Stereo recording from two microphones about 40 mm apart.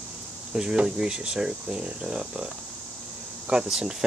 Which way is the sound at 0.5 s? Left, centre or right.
Right.